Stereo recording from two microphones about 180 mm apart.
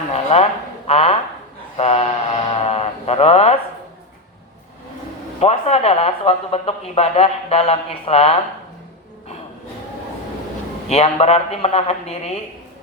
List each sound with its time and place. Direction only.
0.1 s speech: 35° left (ahead or behind)
5.4 s speech: 35° left (ahead or behind)
10.8 s speech: 35° left (ahead or behind)